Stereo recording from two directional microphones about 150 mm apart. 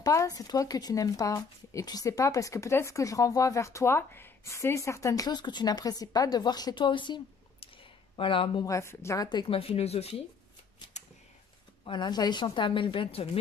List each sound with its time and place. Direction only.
0.0 s speech: 20° left (ahead or behind)
8.2 s speech: 35° left (ahead or behind)
8.6 s speech: 20° left (ahead or behind); by 10.2 s 45° left (ahead or behind)
11.8 s speech: 30° left (ahead or behind)